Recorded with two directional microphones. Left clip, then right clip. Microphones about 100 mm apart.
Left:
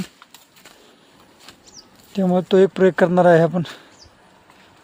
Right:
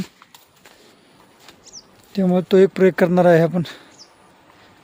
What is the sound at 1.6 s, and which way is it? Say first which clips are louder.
Speech: right 2 dB; 30° right (ahead or behind).